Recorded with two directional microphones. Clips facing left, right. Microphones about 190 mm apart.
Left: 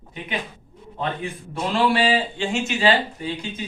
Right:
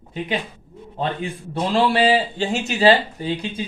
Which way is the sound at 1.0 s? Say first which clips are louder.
Right 2 dB; 30° right (ahead or behind).